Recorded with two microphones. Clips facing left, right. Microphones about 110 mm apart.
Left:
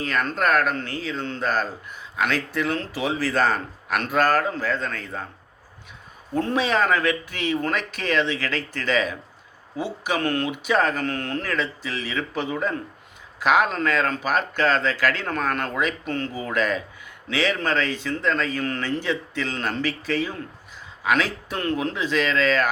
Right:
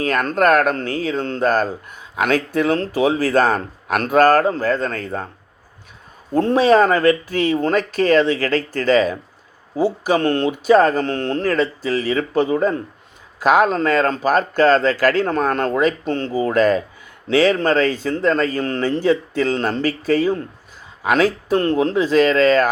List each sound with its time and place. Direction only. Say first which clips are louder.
0.0 s speech: right 7 dB; 45° right (ahead or behind)
6.3 s speech: right 9 dB; 35° right (ahead or behind)